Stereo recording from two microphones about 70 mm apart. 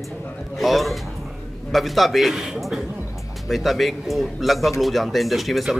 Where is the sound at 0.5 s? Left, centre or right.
Centre.